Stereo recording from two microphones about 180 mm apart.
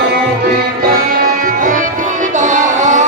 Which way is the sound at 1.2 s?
50° right (ahead or behind).